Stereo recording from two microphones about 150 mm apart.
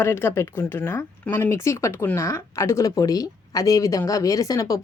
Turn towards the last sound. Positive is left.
turn(degrees=25)  # may be behind; listen again after turning